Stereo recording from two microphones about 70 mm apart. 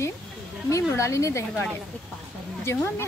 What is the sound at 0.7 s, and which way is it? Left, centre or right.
Speech, left.